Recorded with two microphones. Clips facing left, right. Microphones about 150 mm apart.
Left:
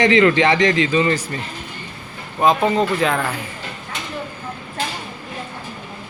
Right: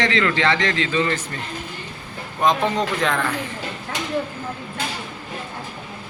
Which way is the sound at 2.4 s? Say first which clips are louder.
Left 3 dB; 5° left (ahead or behind).